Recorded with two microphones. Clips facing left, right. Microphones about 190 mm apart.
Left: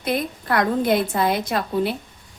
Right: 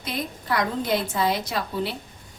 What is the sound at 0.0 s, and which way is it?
A woman's voice, 55° left (ahead or behind).